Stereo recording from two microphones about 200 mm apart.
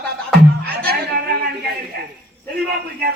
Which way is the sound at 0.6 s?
50° right (ahead or behind).